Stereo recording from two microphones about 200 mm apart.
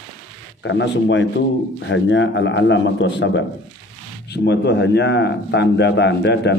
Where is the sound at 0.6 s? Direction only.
65° left (ahead or behind).